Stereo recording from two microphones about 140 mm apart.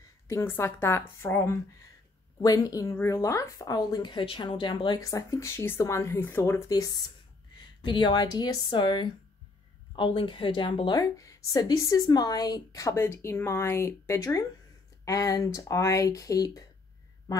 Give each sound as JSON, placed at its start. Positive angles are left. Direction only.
{"t": 0.3, "sound": "a woman's voice", "side_deg": 15}
{"t": 7.5, "sound": "speech", "side_deg": 35}
{"t": 11.0, "sound": "a woman's voice", "side_deg": 25}